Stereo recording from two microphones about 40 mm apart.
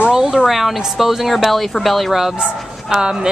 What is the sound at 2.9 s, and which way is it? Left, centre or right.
Speech, centre.